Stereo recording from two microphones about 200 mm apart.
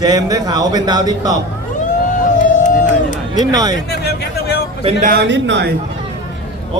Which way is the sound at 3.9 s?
50° left (ahead or behind).